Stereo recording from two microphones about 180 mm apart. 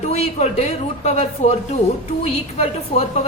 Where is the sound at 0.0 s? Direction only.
35° left (ahead or behind).